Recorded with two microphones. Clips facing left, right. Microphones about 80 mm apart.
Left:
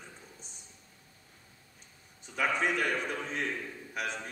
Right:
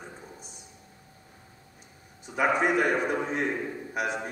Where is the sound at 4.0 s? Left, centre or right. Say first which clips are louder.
Right 6 dB; centre.